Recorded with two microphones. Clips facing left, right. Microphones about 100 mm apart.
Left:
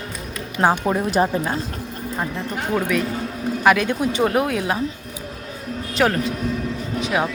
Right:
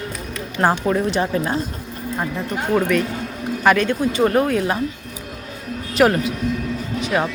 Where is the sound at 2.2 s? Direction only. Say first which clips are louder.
Right 2 dB; 5° right (ahead or behind).